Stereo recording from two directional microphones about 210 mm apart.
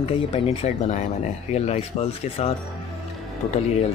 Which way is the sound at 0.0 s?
30° left (ahead or behind).